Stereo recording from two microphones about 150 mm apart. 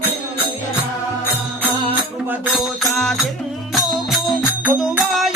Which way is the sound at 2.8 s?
Centre (ahead or behind).